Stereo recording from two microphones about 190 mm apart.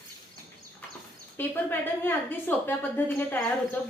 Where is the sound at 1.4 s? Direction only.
10° left (ahead or behind).